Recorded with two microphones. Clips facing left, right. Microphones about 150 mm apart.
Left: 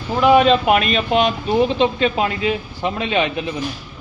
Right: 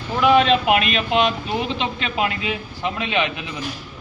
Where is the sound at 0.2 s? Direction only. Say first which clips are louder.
Left 3 dB; 40° left (ahead or behind).